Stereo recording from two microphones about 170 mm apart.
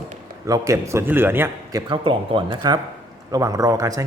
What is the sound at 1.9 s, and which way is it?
Speech, 30° right (ahead or behind).